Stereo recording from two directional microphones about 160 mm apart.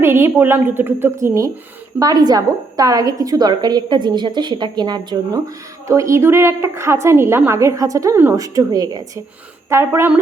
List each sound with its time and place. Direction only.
0.0 s a woman's voice: 15° right (ahead or behind)